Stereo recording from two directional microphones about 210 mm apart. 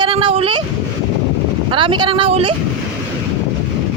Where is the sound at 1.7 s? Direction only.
25° right (ahead or behind).